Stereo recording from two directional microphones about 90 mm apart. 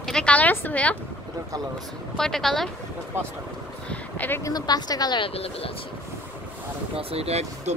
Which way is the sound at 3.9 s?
20° left (ahead or behind).